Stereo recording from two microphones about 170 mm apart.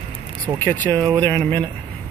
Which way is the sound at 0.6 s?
10° left (ahead or behind).